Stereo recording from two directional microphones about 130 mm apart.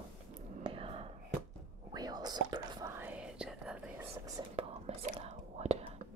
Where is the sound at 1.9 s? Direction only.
30° right (ahead or behind).